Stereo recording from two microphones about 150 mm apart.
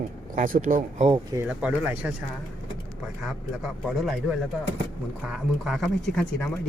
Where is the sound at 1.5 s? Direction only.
10° right (ahead or behind).